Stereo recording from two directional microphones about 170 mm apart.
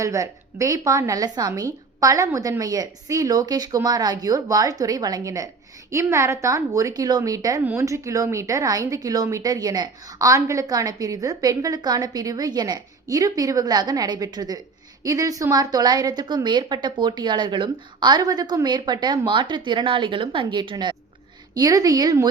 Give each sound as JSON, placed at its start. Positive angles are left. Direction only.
{"t": 0.0, "sound": "speech", "side_deg": -20}